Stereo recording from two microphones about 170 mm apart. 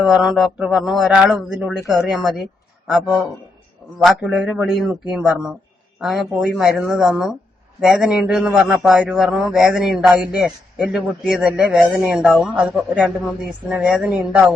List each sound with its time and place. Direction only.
0.0 s a man's voice: centre (ahead or behind)